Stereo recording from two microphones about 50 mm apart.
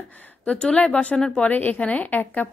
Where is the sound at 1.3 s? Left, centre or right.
Left.